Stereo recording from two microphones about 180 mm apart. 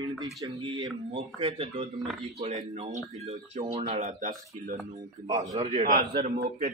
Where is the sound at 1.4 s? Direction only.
30° right (ahead or behind).